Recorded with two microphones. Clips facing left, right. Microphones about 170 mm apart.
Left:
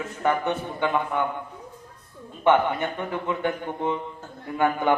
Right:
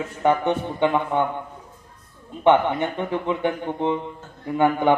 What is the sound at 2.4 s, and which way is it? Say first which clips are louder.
Speech: right 3 dB; 20° right (ahead or behind).